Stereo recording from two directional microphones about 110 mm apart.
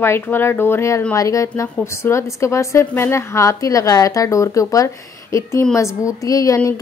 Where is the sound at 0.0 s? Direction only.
20° left (ahead or behind).